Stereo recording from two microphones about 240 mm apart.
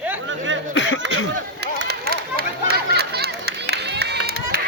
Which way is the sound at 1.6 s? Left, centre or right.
Right.